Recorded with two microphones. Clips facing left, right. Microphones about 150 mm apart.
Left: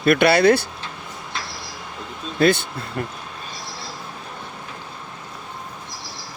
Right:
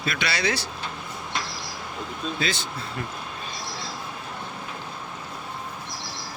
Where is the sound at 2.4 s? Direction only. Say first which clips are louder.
Left 14 dB; 55° left (ahead or behind).